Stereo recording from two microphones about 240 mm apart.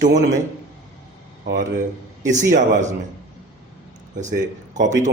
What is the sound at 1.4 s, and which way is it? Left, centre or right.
A man's voice, right.